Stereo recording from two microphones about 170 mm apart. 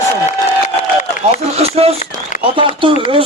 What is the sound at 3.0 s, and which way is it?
Speech, 35° right (ahead or behind).